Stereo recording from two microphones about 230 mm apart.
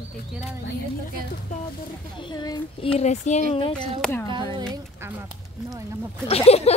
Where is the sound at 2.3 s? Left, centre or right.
Centre.